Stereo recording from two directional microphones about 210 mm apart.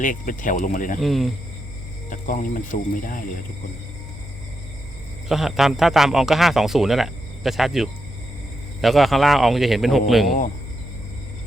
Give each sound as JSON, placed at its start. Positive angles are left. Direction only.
{"t": 0.0, "sound": "speech", "side_deg": 40}
{"t": 0.9, "sound": "speech", "side_deg": 0}
{"t": 2.0, "sound": "speech", "side_deg": 40}
{"t": 5.3, "sound": "speech", "side_deg": 0}